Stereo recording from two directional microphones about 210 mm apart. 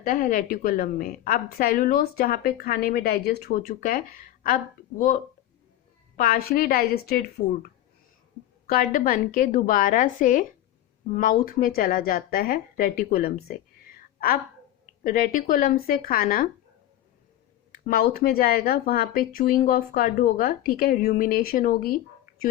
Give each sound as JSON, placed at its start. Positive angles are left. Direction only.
{"t": 0.0, "sound": "a woman's voice", "side_deg": 40}
{"t": 6.1, "sound": "a woman's voice", "side_deg": 45}
{"t": 8.7, "sound": "a woman's voice", "side_deg": 40}
{"t": 17.8, "sound": "a woman's voice", "side_deg": 45}